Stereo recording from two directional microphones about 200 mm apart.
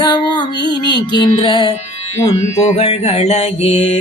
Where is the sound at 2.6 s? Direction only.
30° left (ahead or behind).